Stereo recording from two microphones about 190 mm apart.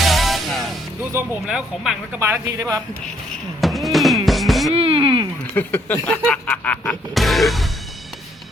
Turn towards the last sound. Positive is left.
turn(degrees=0)  # may be behind; listen again after turning